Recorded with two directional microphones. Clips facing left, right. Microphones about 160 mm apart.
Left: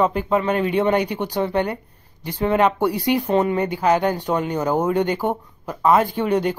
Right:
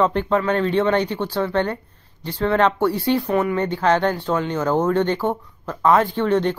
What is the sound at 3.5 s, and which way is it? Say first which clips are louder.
Speech: even; 10° left (ahead or behind).